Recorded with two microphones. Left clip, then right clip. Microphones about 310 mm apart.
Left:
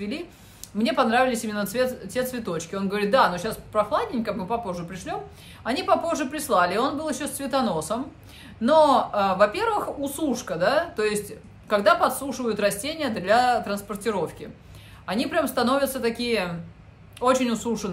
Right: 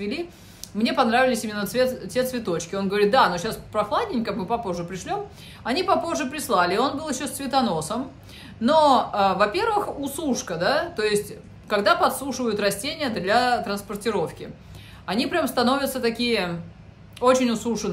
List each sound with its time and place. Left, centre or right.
0.7 s speech: centre